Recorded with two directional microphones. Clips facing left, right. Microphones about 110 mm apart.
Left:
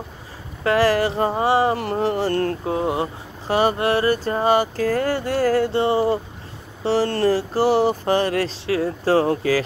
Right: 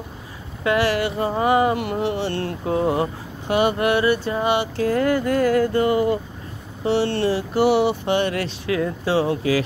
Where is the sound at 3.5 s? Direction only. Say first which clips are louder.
Even; 35° left (ahead or behind).